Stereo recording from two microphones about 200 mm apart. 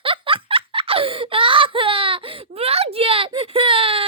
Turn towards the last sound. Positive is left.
turn(degrees=-25)  # may be behind; listen again after turning